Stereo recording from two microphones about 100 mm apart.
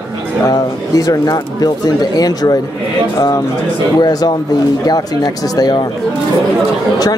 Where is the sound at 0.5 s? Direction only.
40° left (ahead or behind).